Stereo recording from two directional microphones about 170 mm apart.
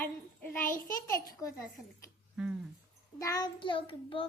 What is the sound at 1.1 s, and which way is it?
Speech, 60° left (ahead or behind).